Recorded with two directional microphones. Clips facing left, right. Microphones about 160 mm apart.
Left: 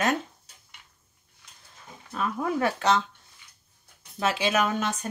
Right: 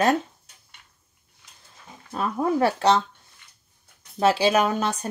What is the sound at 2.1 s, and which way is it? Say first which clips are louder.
Speech: right 4 dB; 35° right (ahead or behind).